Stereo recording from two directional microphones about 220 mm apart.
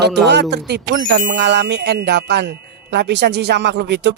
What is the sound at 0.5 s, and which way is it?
Speech, 50° right (ahead or behind).